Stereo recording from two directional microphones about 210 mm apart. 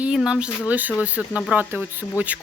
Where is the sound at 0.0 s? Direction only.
5° right (ahead or behind).